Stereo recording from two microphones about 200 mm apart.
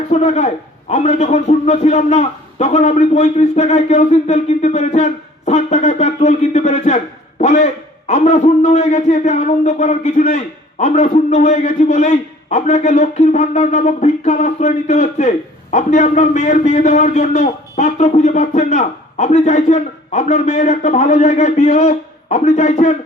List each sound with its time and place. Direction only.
0.1 s a man's voice: 35° left (ahead or behind)